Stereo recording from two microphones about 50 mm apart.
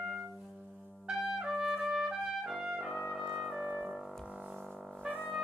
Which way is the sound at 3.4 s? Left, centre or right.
Centre.